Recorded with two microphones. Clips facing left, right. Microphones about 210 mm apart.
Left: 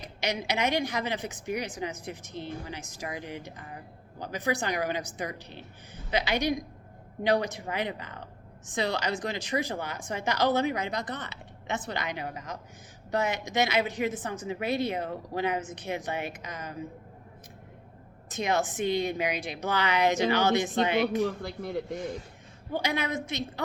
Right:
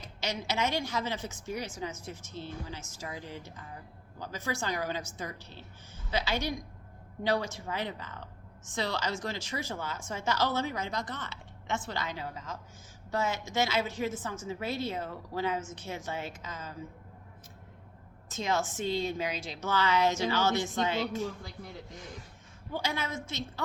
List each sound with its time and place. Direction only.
0.0 s a woman's voice: 15° left (ahead or behind)
18.3 s a woman's voice: 15° left (ahead or behind)
21.2 s a man's voice: 70° left (ahead or behind)
22.7 s a woman's voice: 15° left (ahead or behind)